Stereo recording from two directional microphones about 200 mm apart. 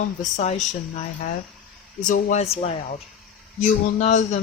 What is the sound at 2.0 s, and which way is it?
Speech, 40° left (ahead or behind).